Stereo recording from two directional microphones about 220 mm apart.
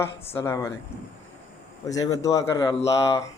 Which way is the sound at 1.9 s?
15° left (ahead or behind).